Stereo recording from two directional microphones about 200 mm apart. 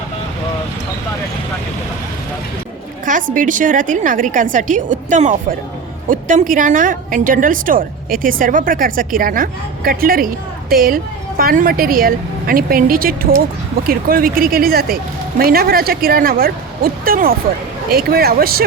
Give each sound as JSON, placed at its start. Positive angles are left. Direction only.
{"t": 3.1, "sound": "a woman's voice", "side_deg": -40}